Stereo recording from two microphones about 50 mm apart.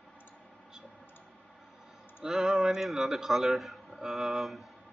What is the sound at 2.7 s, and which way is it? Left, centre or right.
A man's voice, centre.